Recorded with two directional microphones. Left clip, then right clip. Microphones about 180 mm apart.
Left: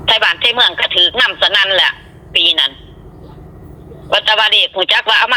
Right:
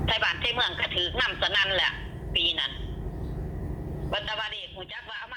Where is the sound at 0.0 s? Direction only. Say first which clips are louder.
Left 14 dB; 35° left (ahead or behind).